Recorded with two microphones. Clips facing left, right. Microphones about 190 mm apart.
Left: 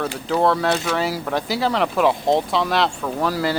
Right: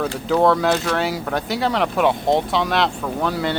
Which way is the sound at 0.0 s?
Centre (ahead or behind).